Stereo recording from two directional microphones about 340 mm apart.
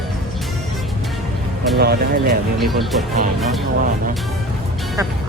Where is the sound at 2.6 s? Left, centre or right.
Centre.